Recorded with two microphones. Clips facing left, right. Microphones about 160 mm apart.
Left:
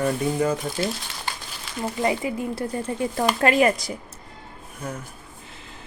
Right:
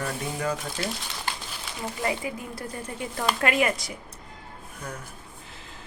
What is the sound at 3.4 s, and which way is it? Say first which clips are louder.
Speech: left 6 dB; 35° left (ahead or behind).